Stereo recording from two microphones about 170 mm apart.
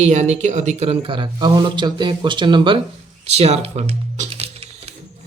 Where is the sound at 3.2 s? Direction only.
40° right (ahead or behind).